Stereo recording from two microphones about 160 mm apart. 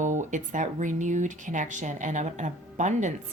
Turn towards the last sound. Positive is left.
turn(degrees=-50)  # may be behind; listen again after turning